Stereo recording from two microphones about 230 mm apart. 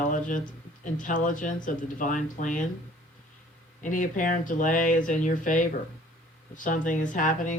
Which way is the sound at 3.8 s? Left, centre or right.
Left.